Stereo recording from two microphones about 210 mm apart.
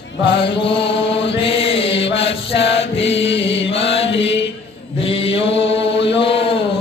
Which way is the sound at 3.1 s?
60° left (ahead or behind).